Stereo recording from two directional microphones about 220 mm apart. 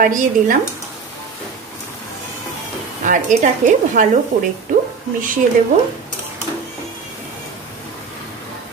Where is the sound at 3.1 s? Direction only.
35° right (ahead or behind).